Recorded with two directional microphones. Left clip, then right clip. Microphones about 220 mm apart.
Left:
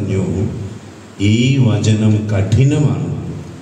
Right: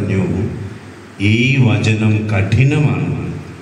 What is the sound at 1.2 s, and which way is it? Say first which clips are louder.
A man's voice: right 1 dB; 20° left (ahead or behind).